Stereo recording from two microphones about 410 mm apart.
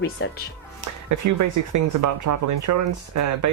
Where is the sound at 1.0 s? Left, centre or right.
Right.